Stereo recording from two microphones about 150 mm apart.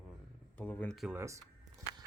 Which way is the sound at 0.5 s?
10° left (ahead or behind).